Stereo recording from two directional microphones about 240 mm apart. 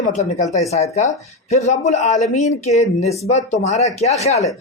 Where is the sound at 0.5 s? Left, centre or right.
Left.